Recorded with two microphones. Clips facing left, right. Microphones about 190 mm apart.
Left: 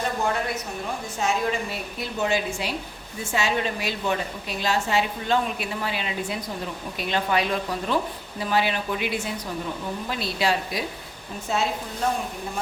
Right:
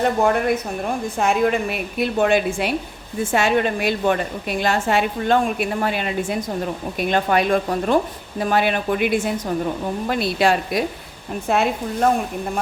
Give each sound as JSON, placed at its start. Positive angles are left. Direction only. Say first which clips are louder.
{"t": 0.0, "sound": "a woman's voice", "louder": "right 8 dB", "side_deg": -55}